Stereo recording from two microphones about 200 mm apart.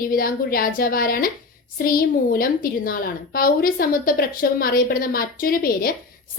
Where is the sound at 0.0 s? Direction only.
45° left (ahead or behind).